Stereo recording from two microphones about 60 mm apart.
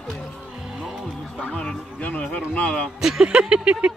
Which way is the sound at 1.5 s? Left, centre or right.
Centre.